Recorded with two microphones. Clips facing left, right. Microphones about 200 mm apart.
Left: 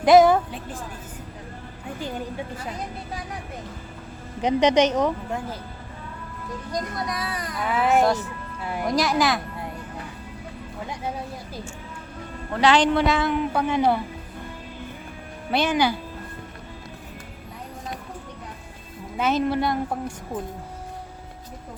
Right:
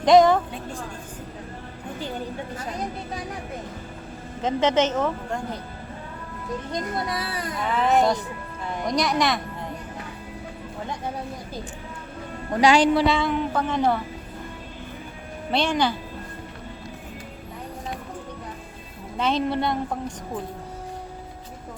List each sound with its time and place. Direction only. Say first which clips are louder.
0.0 s a woman's voice: left 1 dB; 5° left (ahead or behind)
4.4 s a woman's voice: left 3 dB; 15° left (ahead or behind)
6.7 s speech: even; 25° right (ahead or behind)
7.8 s a woman's voice: left 1 dB; 5° left (ahead or behind)
12.5 s a woman's voice: right 1 dB; 10° right (ahead or behind); by 14.0 s 10° left (ahead or behind)
15.5 s a woman's voice: left 1 dB; 5° left (ahead or behind)
19.1 s a woman's voice: left 1 dB; 5° left (ahead or behind)